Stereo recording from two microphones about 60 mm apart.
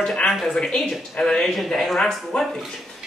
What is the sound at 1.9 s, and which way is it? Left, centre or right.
Speech, centre.